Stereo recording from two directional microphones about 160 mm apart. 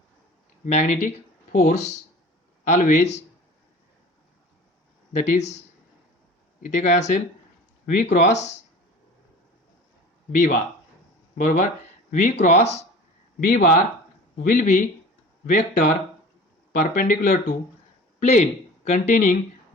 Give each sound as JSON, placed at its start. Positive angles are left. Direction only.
{"t": 0.6, "sound": "speech", "side_deg": 50}
{"t": 5.1, "sound": "speech", "side_deg": 45}
{"t": 6.6, "sound": "speech", "side_deg": 55}
{"t": 10.3, "sound": "speech", "side_deg": 60}
{"t": 13.4, "sound": "speech", "side_deg": 80}
{"t": 14.3, "sound": "speech", "side_deg": 60}
{"t": 16.7, "sound": "speech", "side_deg": 55}
{"t": 18.2, "sound": "speech", "side_deg": 45}